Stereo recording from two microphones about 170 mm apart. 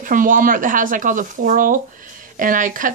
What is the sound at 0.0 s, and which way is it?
Speech, 50° right (ahead or behind).